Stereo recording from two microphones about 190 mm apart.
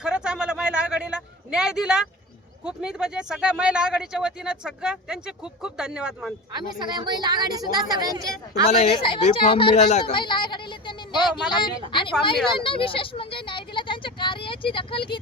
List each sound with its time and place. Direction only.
0.0 s a sound: 5° right (ahead or behind)
2.6 s speech: 5° right (ahead or behind)
6.5 s a woman's voice: 20° right (ahead or behind)
8.7 s speech: 30° left (ahead or behind)
10.2 s speech: 25° left (ahead or behind)